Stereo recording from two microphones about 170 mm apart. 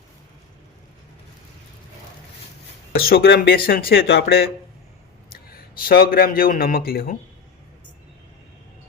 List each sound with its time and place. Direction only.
2.9 s a man's voice: 65° left (ahead or behind)